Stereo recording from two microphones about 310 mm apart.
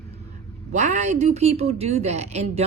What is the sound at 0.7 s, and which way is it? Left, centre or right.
A woman's voice, right.